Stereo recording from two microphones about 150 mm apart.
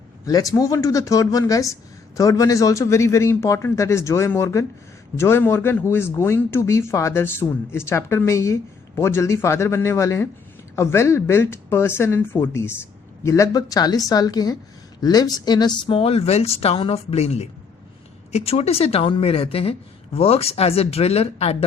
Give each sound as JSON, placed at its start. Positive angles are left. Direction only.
{"t": 0.3, "sound": "a man's voice", "side_deg": 25}